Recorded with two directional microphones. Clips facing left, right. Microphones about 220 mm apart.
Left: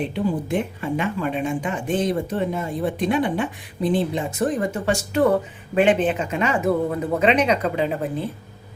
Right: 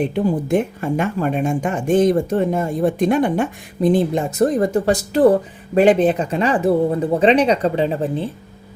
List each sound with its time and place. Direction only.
0.1 s speech: 45° right (ahead or behind)